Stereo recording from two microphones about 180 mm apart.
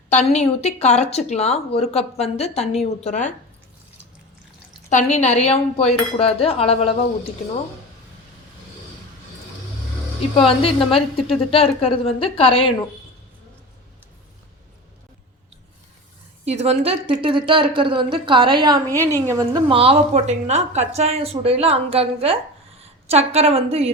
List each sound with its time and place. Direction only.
0.1 s speech: 40° left (ahead or behind)
4.9 s speech: 40° left (ahead or behind)
10.3 s speech: 30° left (ahead or behind)
16.5 s a woman's voice: 35° right (ahead or behind)